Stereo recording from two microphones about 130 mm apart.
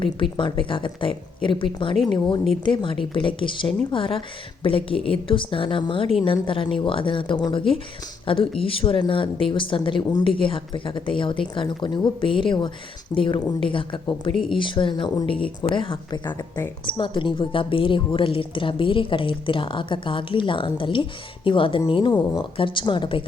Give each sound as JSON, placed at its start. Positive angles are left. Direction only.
{"t": 0.0, "sound": "speech", "side_deg": 40}